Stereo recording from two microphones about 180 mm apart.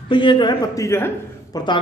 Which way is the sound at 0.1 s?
25° left (ahead or behind).